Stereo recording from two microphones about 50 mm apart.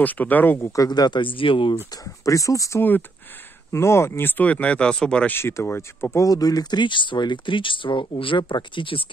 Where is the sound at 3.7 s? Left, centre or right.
Left.